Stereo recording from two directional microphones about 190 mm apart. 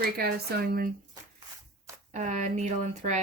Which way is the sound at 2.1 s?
40° right (ahead or behind).